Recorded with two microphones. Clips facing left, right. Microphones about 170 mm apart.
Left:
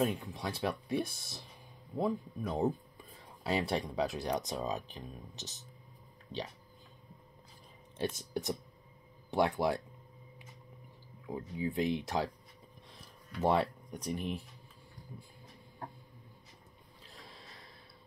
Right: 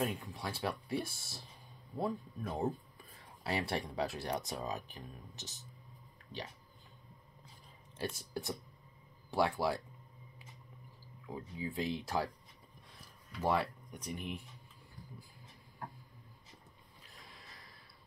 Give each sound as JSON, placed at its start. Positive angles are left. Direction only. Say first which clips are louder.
{"t": 0.0, "sound": "speech", "louder": "left 4 dB", "side_deg": 20}
{"t": 8.0, "sound": "speech", "louder": "left 4 dB", "side_deg": 20}
{"t": 11.2, "sound": "speech", "louder": "left 5 dB", "side_deg": 15}
{"t": 13.4, "sound": "speech", "louder": "left 4 dB", "side_deg": 25}
{"t": 17.1, "sound": "a sound", "louder": "left 4 dB", "side_deg": 30}